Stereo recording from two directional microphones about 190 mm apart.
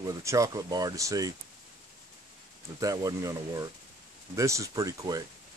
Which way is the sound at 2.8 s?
20° right (ahead or behind).